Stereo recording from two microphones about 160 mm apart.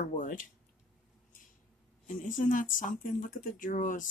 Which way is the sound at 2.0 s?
55° left (ahead or behind).